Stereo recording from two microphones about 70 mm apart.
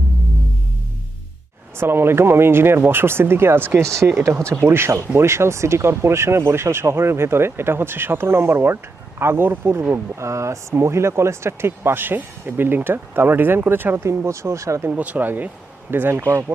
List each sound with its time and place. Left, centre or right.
1.8 s speech: right
3.8 s speech: right
14.0 s speech: right
14.8 s speech: right